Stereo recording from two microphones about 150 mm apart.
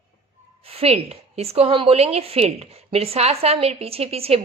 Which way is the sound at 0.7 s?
40° right (ahead or behind).